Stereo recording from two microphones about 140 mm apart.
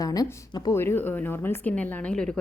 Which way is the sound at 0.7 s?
15° left (ahead or behind).